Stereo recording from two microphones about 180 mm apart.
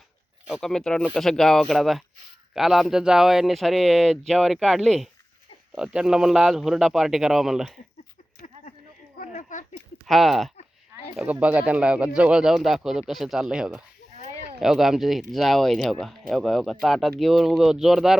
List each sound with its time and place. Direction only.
0.4 s speech: centre (ahead or behind)
9.1 s a sound: 45° left (ahead or behind)
10.1 s speech: centre (ahead or behind)